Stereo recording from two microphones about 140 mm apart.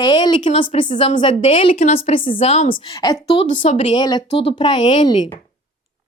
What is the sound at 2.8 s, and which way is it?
Speech, 30° left (ahead or behind).